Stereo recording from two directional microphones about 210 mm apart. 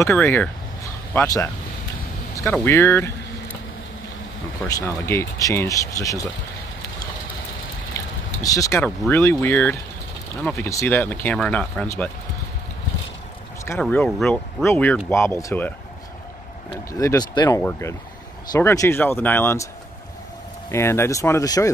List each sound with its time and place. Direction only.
0.1 s speech: 10° left (ahead or behind)
2.5 s speech: 10° left (ahead or behind)
4.6 s speech: 15° left (ahead or behind)
7.9 s vehicle: 15° left (ahead or behind)
9.1 s speech: 10° left (ahead or behind)
13.7 s speech: 5° left (ahead or behind)
17.0 s speech: 15° left (ahead or behind)
20.7 s speech: 10° left (ahead or behind)